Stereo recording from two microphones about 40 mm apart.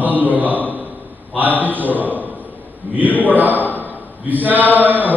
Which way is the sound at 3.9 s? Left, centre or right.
Right.